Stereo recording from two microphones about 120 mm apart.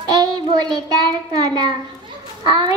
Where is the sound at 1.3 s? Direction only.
35° right (ahead or behind).